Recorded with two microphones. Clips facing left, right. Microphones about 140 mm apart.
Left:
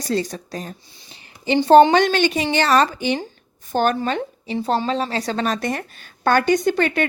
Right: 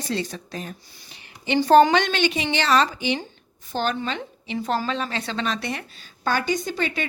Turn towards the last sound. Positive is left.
turn(degrees=60)  # may be behind; listen again after turning